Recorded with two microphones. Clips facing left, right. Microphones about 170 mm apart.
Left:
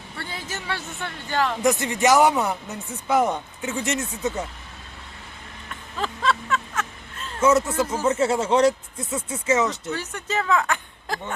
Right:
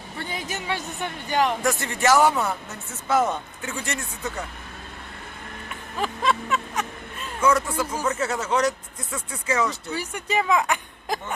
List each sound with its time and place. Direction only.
0.2 s speech: 15° right (ahead or behind)
1.6 s speech: 20° left (ahead or behind)
6.0 s a sound: 15° right (ahead or behind)
7.4 s speech: 25° left (ahead or behind)
9.9 s speech: 10° right (ahead or behind)